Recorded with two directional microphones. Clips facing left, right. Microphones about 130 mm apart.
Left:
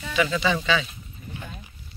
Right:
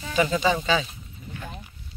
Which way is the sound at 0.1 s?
40° right (ahead or behind).